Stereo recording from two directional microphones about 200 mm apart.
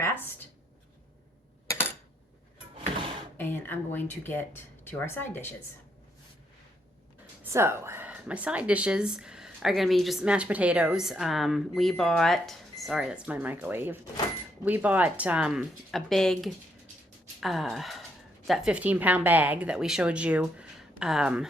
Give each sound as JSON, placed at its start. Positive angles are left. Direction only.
{"t": 0.0, "sound": "writing", "side_deg": 10}
{"t": 3.3, "sound": "speech", "side_deg": 10}
{"t": 7.5, "sound": "speech", "side_deg": -15}